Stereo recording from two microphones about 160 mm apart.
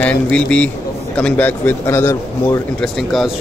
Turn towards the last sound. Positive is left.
turn(degrees=0)  # may be behind; listen again after turning